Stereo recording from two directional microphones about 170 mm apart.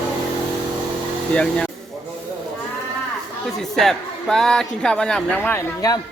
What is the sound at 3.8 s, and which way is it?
A man's voice, centre (ahead or behind).